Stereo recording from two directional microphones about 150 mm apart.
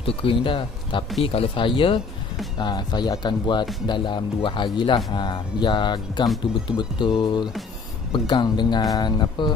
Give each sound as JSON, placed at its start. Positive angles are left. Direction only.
{"t": 0.0, "sound": "speech", "side_deg": 35}